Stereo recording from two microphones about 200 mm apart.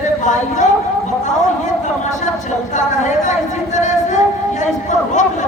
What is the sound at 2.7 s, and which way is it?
A man's voice, 35° left (ahead or behind).